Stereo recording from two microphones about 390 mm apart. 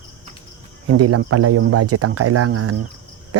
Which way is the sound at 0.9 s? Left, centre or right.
Right.